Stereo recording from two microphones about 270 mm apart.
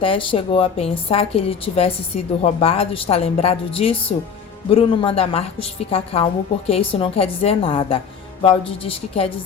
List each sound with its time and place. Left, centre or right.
0.0 s a woman's voice: centre